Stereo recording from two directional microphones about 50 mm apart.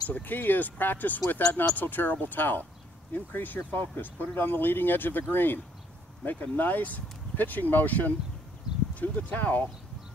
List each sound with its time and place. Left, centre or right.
0.1 s speech: left